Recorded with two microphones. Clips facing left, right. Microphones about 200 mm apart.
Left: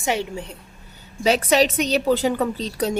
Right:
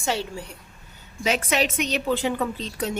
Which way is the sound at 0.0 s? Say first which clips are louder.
Left 3 dB; 20° left (ahead or behind).